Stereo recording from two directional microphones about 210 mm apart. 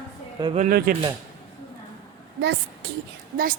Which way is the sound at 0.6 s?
45° right (ahead or behind).